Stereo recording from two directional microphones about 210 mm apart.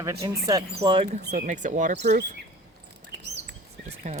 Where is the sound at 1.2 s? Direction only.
50° right (ahead or behind).